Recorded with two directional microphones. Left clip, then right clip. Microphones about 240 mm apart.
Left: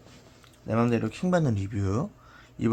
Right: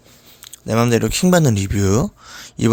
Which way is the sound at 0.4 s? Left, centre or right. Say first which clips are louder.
Right 9 dB; right.